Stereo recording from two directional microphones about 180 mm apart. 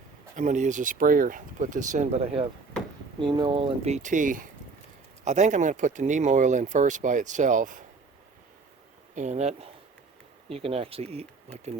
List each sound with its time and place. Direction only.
0.3 s speech: 45° right (ahead or behind)
9.1 s speech: 40° right (ahead or behind)